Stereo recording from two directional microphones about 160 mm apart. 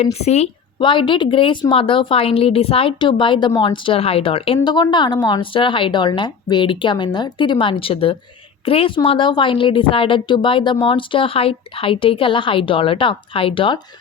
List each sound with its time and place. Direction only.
0.0 s a woman's voice: 40° left (ahead or behind)
0.8 s a woman's voice: 30° left (ahead or behind)